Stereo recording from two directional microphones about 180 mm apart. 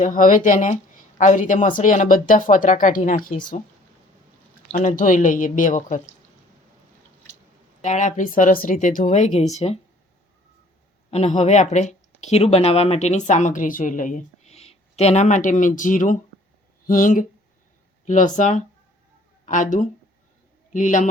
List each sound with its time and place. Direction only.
0.0 s speech: 45° left (ahead or behind)
4.8 s speech: 45° left (ahead or behind)
7.8 s speech: 40° left (ahead or behind)
11.1 s speech: 35° left (ahead or behind)